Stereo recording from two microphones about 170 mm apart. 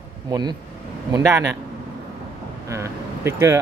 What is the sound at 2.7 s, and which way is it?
Speech, 15° right (ahead or behind).